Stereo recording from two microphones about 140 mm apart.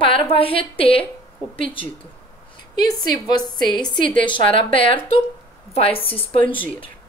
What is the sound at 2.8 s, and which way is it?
A woman's voice, 30° left (ahead or behind).